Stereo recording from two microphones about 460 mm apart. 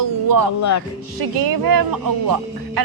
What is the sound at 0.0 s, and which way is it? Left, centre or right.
Music, right.